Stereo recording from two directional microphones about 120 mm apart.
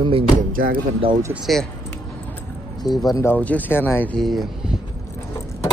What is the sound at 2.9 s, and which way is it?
Speech, 35° left (ahead or behind).